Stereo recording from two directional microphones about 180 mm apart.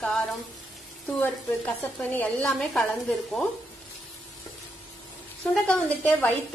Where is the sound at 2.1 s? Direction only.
5° left (ahead or behind).